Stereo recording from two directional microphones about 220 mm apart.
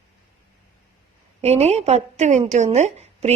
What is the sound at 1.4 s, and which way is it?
A woman's voice, 30° right (ahead or behind).